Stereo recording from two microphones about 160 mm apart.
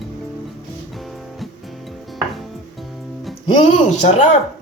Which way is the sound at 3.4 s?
45° left (ahead or behind).